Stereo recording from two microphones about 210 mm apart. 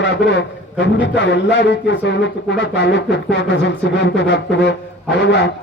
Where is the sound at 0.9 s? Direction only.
60° left (ahead or behind).